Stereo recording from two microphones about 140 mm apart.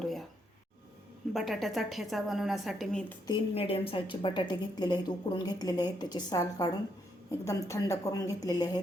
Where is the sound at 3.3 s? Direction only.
40° left (ahead or behind).